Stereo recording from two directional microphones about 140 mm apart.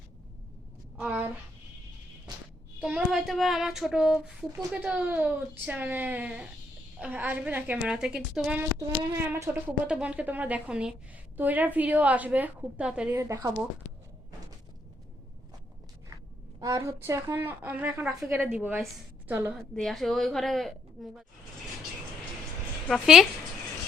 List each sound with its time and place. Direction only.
0.9 s child singing: 10° right (ahead or behind)
2.8 s child singing: 5° right (ahead or behind)
13.1 s a woman's voice: 20° right (ahead or behind)
16.6 s child singing: 25° right (ahead or behind)
19.5 s speech: 5° left (ahead or behind)
22.9 s speech: 5° right (ahead or behind)